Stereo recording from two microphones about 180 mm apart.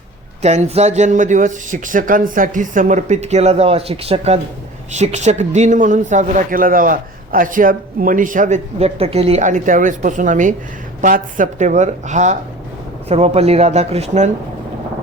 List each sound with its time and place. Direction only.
0.4 s a man's voice: 35° right (ahead or behind)